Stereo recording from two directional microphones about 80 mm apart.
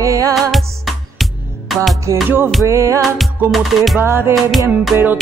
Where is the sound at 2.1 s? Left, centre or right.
Right.